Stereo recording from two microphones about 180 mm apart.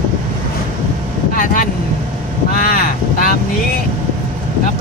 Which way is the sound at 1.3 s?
50° left (ahead or behind).